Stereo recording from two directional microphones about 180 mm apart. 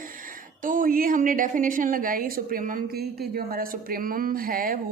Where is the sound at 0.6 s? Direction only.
50° right (ahead or behind).